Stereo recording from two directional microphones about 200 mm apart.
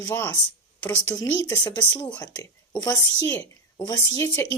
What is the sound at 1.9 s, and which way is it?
Speech, 5° left (ahead or behind).